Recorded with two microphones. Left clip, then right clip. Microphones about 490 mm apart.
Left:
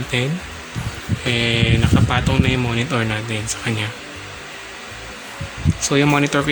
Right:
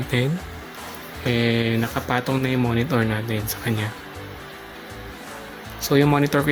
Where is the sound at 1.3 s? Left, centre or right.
Right.